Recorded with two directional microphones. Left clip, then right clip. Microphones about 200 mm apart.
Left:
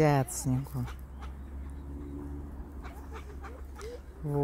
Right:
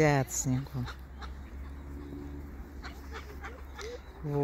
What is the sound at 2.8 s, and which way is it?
Goose, 30° left (ahead or behind).